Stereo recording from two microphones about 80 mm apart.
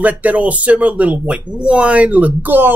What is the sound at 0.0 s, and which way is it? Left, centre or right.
Speech, centre.